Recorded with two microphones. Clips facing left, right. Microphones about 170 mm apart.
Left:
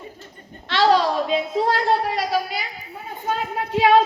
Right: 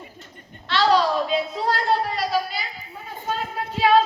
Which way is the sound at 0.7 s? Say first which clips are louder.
Left 2 dB; 45° left (ahead or behind).